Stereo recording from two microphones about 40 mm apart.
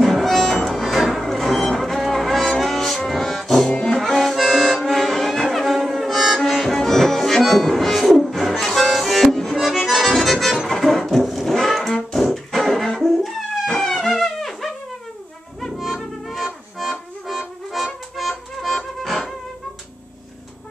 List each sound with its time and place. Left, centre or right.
0.0 s music: centre
3.6 s music: centre
3.9 s accordion: centre
4.7 s music: centre
9.6 s accordion: centre
10.7 s music: centre
11.2 s music: centre
15.8 s music: centre
16.7 s accordion: centre
17.7 s music: centre